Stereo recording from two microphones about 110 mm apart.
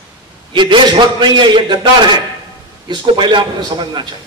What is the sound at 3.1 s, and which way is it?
Speech, 45° right (ahead or behind).